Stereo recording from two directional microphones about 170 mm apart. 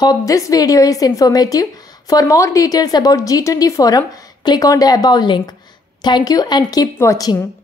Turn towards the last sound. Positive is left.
turn(degrees=20)  # may be behind; listen again after turning